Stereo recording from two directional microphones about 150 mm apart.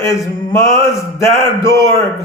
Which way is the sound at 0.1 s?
20° left (ahead or behind).